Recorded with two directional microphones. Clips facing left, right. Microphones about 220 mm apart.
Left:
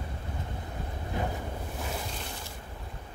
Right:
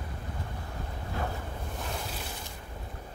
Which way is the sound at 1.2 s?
15° left (ahead or behind).